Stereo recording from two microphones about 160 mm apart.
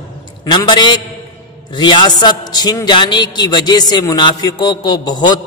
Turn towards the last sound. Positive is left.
turn(degrees=25)  # may be behind; listen again after turning